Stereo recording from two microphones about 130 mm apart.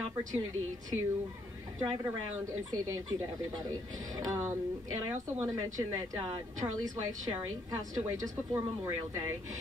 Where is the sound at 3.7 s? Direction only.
25° right (ahead or behind).